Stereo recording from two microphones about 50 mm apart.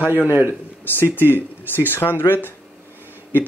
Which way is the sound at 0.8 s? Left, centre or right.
Left.